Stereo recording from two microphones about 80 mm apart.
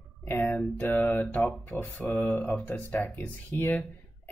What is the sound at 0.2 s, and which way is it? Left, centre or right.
Speech, left.